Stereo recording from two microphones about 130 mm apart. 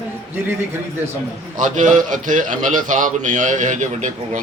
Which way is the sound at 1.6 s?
75° right (ahead or behind).